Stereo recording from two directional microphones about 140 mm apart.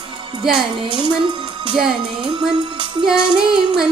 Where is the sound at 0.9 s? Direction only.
35° right (ahead or behind).